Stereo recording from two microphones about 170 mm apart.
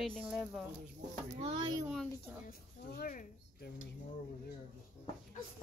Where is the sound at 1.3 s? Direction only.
35° right (ahead or behind).